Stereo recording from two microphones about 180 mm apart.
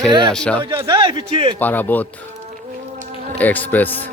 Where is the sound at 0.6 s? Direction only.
25° right (ahead or behind).